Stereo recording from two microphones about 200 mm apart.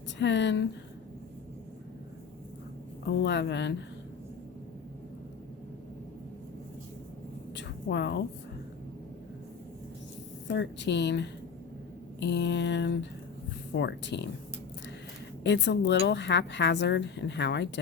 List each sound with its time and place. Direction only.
0.2 s a woman's voice: 60° left (ahead or behind)
3.1 s a woman's voice: 60° left (ahead or behind)
7.5 s a sound: 60° left (ahead or behind)
10.5 s a woman's voice: 65° left (ahead or behind)
15.4 s a woman's voice: 60° left (ahead or behind)